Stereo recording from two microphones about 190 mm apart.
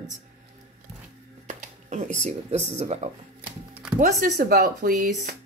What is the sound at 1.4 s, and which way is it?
Computer keyboard, 40° right (ahead or behind).